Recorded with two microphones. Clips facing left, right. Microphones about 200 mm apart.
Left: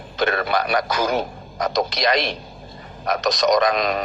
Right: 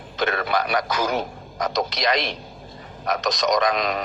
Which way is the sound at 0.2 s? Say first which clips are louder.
Left 2 dB; 40° left (ahead or behind).